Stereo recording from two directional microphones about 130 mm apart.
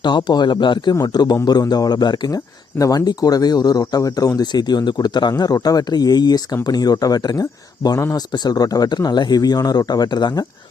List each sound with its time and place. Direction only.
0.0 s speech: 35° left (ahead or behind)